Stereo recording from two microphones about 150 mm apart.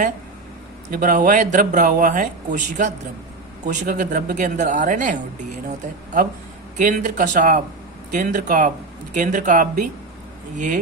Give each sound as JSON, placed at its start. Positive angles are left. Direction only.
{"t": 0.9, "sound": "speech", "side_deg": -65}
{"t": 6.7, "sound": "speech", "side_deg": -55}